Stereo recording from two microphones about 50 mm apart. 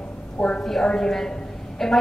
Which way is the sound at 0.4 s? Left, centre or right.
Left.